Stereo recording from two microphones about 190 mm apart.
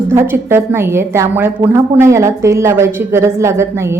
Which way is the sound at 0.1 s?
10° right (ahead or behind).